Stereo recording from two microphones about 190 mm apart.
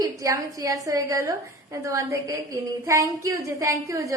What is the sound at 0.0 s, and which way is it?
A woman's voice, 15° right (ahead or behind).